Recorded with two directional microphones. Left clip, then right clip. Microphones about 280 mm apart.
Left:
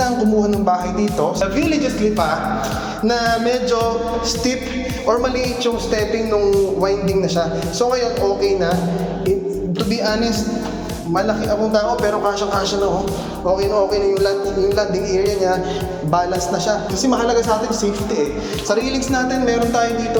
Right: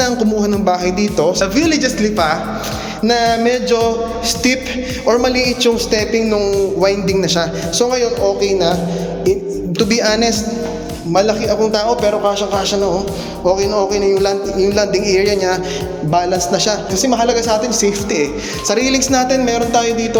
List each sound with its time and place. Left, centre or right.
0.0 s music: right
0.6 s a man's voice: right
3.1 s music: right
5.0 s a man's voice: right
9.7 s a man's voice: right
13.6 s a man's voice: right
16.6 s a man's voice: right